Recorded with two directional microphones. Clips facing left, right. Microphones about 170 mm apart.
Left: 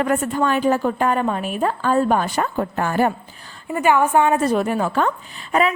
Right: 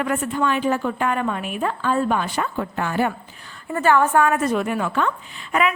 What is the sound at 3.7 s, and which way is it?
A woman's voice, 15° left (ahead or behind).